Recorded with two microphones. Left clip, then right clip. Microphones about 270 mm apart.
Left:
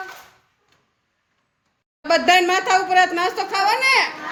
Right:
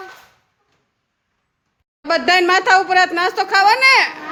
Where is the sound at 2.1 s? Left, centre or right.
Centre.